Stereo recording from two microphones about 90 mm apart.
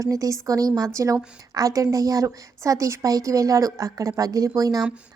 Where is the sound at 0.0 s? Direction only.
35° right (ahead or behind).